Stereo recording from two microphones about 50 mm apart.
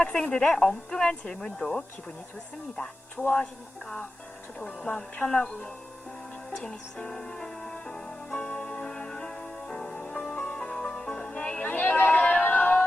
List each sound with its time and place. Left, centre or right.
0.2 s speech: centre
6.6 s music: centre
8.4 s music: left
11.6 s a sound: left
12.3 s music: left